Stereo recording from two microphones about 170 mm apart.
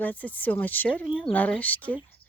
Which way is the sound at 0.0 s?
10° left (ahead or behind).